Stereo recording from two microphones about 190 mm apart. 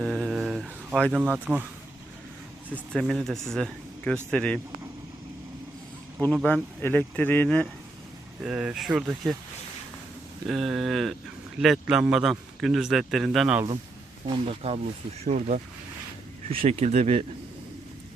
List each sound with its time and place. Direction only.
0.0 s a sound: centre (ahead or behind)
1.2 s speech: 10° right (ahead or behind)
2.6 s speech: 5° left (ahead or behind)
6.2 s speech: 5° left (ahead or behind)
8.4 s speech: 5° right (ahead or behind)
10.4 s speech: centre (ahead or behind)
14.4 s speech: 30° right (ahead or behind)
16.6 s speech: 35° right (ahead or behind)